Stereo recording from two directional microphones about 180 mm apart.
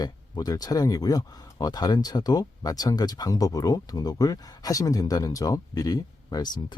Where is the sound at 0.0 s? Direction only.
20° left (ahead or behind).